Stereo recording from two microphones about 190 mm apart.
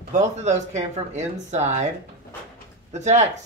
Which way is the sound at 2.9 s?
35° right (ahead or behind).